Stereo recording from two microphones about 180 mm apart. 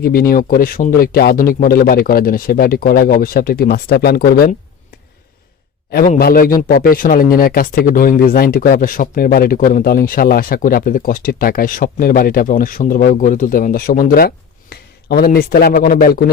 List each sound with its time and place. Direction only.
0.0 s speech: 55° left (ahead or behind)
5.9 s speech: 55° left (ahead or behind)